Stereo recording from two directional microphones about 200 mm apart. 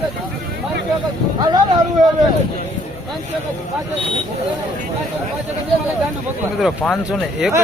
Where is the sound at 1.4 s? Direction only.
20° right (ahead or behind).